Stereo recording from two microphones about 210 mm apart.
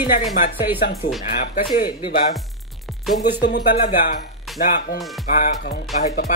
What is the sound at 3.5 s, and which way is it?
Speech, 45° left (ahead or behind).